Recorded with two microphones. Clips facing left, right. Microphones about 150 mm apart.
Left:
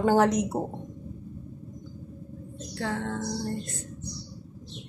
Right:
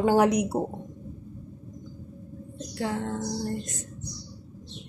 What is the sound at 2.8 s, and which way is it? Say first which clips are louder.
Speech: right 1 dB; 15° right (ahead or behind).